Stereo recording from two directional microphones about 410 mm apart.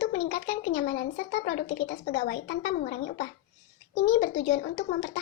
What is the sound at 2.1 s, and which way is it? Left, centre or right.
A child's voice, left.